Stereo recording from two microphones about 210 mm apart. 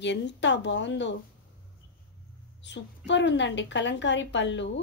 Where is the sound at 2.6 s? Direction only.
55° left (ahead or behind).